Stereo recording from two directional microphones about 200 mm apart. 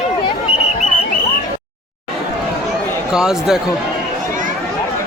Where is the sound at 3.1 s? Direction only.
5° right (ahead or behind).